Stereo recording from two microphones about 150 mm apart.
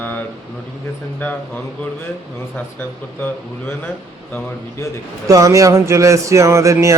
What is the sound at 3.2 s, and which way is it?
Speech, 10° left (ahead or behind).